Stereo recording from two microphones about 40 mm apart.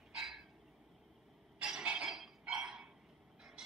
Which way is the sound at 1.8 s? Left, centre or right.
Right.